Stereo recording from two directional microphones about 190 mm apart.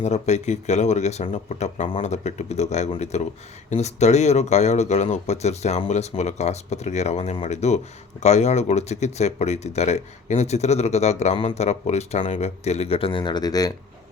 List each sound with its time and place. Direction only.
0.0 s speech: 35° left (ahead or behind); by 13.7 s 20° left (ahead or behind)